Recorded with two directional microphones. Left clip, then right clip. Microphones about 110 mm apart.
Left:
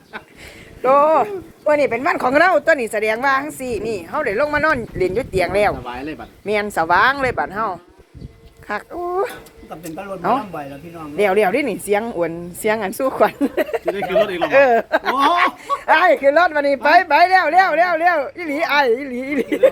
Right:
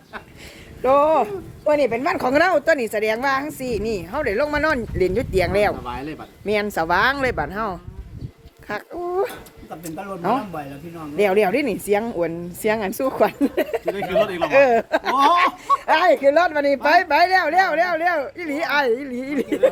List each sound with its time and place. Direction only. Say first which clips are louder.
0.8 s speech: left 3 dB; 20° right (ahead or behind); by 5.7 s 40° right (ahead or behind)
5.9 s a man's voice: left 2 dB; centre (ahead or behind)
6.4 s speech: left 2 dB; 35° right (ahead or behind)
8.9 s speech: left 1 dB; 25° right (ahead or behind)
14.8 s speech: left 1 dB; 30° right (ahead or behind)
16.0 s speech: left 1 dB; 40° right (ahead or behind)
16.6 s speech: left 3 dB; 25° right (ahead or behind)